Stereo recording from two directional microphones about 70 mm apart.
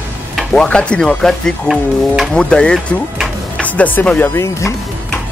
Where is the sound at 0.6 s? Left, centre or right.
Centre.